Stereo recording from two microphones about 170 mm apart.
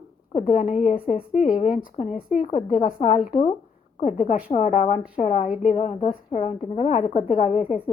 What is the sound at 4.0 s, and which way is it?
A woman's voice, 45° left (ahead or behind).